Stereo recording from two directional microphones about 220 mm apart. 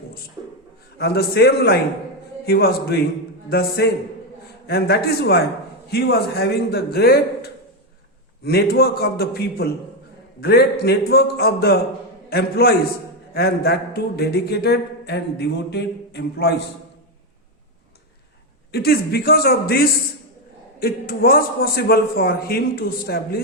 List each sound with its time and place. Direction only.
0.9 s a man's voice: 45° left (ahead or behind)
18.7 s a man's voice: 45° left (ahead or behind)